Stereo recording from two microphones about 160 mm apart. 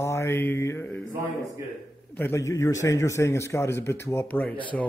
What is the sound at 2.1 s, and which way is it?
A man's voice, 15° left (ahead or behind).